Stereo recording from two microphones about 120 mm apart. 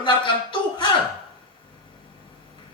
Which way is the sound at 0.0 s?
45° left (ahead or behind).